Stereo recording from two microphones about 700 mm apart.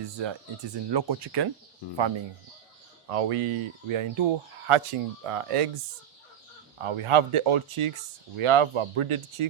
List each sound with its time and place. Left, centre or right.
0.2 s speech: right
3.1 s speech: right
6.8 s speech: right